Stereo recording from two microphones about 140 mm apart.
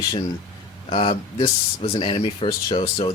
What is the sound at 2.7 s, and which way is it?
Speech, 30° left (ahead or behind).